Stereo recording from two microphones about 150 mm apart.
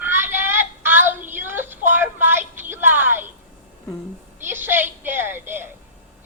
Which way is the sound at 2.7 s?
15° right (ahead or behind).